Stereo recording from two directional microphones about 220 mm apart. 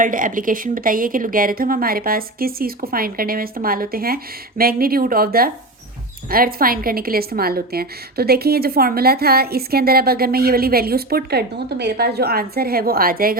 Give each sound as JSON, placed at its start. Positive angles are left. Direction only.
{"t": 0.0, "sound": "a woman's voice", "side_deg": -35}